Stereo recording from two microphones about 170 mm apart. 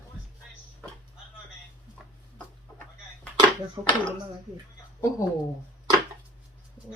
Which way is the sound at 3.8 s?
25° right (ahead or behind).